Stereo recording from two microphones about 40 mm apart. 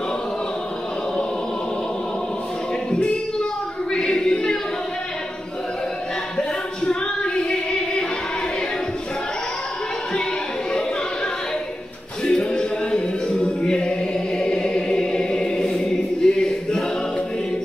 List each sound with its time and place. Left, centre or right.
2.9 s a sound: left
3.9 s choir: left
6.3 s female singing: centre
12.3 s music: centre
14.4 s choir: centre